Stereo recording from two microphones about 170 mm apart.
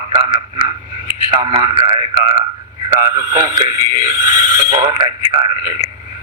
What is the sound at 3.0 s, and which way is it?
A man's voice, 25° right (ahead or behind).